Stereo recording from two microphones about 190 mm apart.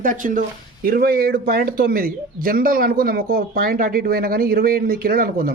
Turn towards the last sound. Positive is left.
turn(degrees=-50)  # may be behind; listen again after turning